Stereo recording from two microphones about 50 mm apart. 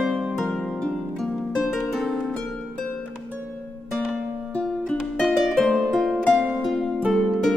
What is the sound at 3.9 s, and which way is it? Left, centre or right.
Music, centre.